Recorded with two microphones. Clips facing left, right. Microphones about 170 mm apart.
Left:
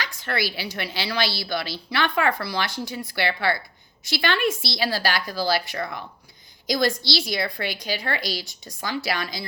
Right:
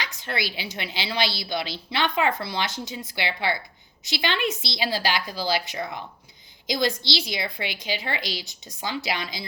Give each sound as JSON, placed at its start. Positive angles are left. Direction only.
{"t": 0.0, "sound": "a woman's voice", "side_deg": -20}